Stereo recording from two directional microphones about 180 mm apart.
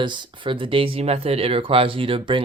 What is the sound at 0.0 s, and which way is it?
Speech, 30° right (ahead or behind).